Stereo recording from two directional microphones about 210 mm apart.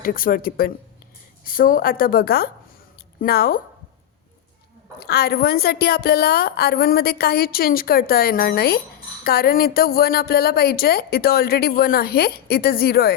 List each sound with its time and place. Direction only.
0.0 s a woman's voice: 45° left (ahead or behind)
4.9 s a woman's voice: 50° left (ahead or behind)